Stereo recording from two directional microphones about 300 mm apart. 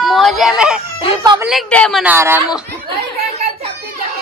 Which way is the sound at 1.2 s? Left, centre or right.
Centre.